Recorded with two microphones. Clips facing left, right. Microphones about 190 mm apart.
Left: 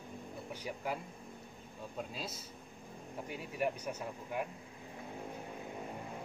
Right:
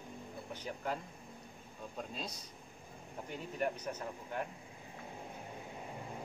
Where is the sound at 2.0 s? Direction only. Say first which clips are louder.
Left 1 dB; 5° left (ahead or behind).